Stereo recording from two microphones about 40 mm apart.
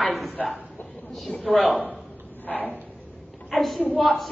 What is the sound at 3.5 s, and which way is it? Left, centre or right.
Speech, centre.